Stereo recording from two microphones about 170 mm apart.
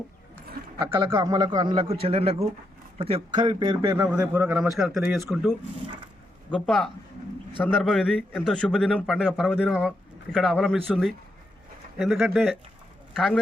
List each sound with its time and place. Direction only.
0.9 s a man's voice: 20° right (ahead or behind); by 13.4 s centre (ahead or behind)